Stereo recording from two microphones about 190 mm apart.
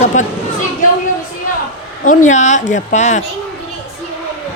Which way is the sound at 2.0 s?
40° left (ahead or behind).